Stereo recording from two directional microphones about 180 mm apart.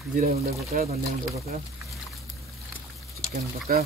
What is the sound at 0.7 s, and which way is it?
Speech, 50° right (ahead or behind).